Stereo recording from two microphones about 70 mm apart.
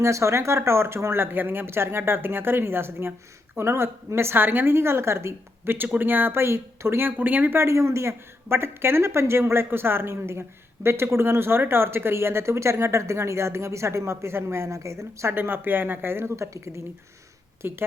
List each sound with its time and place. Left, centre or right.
0.0 s speech: right
7.2 s speech: right
17.6 s speech: right